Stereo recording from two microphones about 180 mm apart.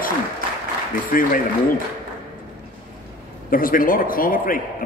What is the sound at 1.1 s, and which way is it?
Speech, 50° left (ahead or behind).